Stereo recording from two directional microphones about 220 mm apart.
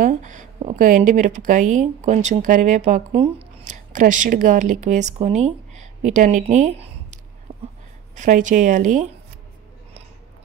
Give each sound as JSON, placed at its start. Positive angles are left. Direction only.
{"t": 0.0, "sound": "speech", "side_deg": -35}